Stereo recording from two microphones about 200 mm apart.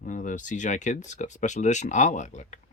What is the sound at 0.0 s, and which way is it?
Speech, 40° left (ahead or behind).